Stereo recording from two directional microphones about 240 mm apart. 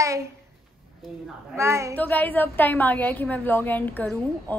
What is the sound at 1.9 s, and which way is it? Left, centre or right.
A woman's voice, centre.